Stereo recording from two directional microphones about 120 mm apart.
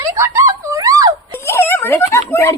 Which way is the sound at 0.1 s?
25° right (ahead or behind).